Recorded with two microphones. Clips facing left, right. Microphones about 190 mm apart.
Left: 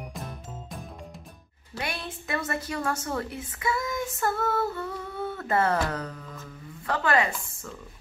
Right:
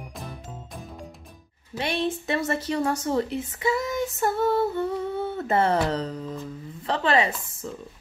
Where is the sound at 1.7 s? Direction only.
25° right (ahead or behind).